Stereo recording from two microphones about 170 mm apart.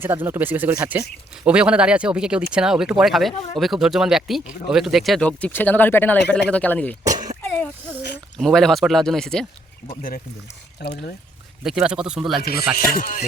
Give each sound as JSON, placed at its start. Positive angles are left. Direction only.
{"t": 0.0, "sound": "speech", "side_deg": -15}
{"t": 8.4, "sound": "speech", "side_deg": 0}
{"t": 10.8, "sound": "speech", "side_deg": 75}
{"t": 11.6, "sound": "speech", "side_deg": -5}
{"t": 12.4, "sound": "music", "side_deg": 65}
{"t": 12.9, "sound": "speech", "side_deg": 55}